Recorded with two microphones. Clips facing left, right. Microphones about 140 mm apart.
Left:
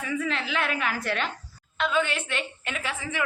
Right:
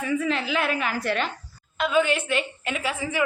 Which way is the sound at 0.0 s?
5° right (ahead or behind).